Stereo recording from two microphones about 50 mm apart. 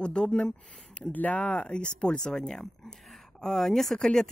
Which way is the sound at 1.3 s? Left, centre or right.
Centre.